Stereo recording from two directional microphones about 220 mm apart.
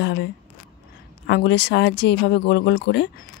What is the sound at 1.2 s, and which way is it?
Speech, 50° left (ahead or behind).